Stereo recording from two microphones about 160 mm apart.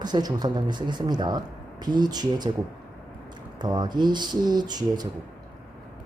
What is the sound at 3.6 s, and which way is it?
Speech, 25° right (ahead or behind).